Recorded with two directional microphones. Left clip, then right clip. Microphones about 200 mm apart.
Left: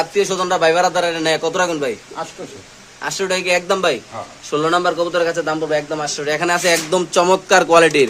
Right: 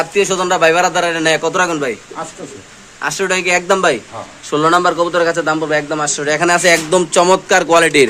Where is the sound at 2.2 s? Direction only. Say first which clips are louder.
Right 1 dB; 50° left (ahead or behind).